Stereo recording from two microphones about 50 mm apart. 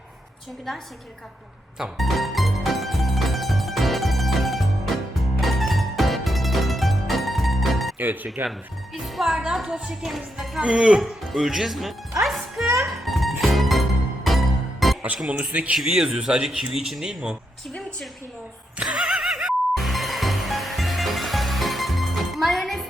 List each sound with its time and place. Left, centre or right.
2.0 s music: centre
7.9 s speech: right
9.1 s music: centre
9.6 s speech: right
9.9 s speech: centre
10.6 s speech: right
11.0 s speech: centre
12.2 s music: centre
15.3 s speech: right
15.7 s speech: centre
18.8 s a sound: right
19.7 s music: centre